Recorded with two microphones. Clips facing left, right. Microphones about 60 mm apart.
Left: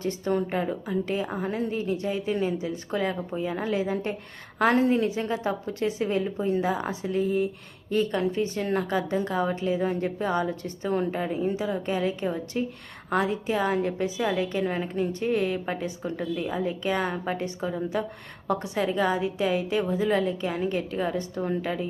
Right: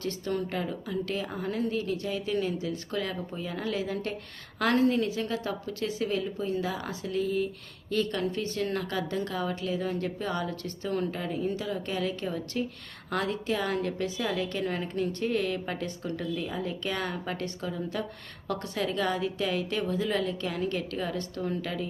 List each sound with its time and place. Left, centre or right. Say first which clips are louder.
0.0 s a woman's voice: left 5 dB; left